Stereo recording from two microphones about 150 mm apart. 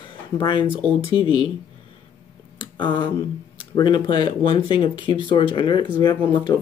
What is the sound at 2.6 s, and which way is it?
Speech, 30° left (ahead or behind).